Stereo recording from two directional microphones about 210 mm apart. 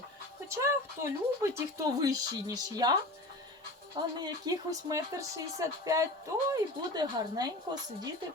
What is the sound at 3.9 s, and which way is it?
Speech, 20° right (ahead or behind).